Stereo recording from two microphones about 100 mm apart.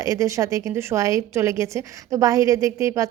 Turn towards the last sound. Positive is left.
turn(degrees=-30)  # may be behind; listen again after turning